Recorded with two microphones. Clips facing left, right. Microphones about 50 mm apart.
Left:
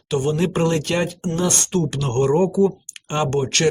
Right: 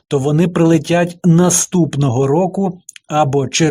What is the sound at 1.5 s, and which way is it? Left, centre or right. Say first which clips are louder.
Speech: right 6 dB; centre.